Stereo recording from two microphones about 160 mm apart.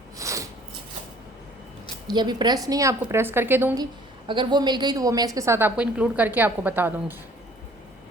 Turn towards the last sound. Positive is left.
turn(degrees=-10)  # may be behind; listen again after turning